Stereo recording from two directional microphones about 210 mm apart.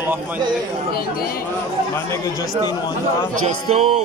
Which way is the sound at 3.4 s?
30° right (ahead or behind).